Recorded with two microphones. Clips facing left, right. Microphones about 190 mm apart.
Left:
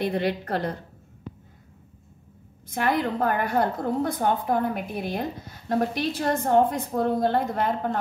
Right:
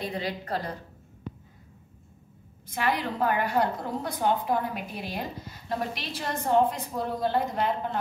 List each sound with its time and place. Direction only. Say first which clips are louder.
0.0 s a woman's voice: left 7 dB; 60° left (ahead or behind)
2.7 s a woman's voice: left 4 dB; 50° left (ahead or behind)